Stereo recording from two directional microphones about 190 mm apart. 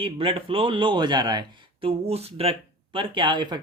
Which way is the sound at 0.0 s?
25° right (ahead or behind).